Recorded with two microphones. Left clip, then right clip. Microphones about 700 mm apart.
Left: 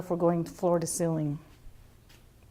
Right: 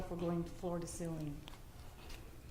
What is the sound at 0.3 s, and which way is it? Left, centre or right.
Speech, left.